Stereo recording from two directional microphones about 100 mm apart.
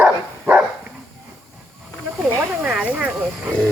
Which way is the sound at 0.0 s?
15° right (ahead or behind).